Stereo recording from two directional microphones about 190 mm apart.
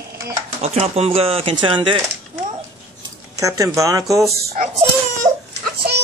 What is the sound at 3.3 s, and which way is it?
Speech, 15° right (ahead or behind).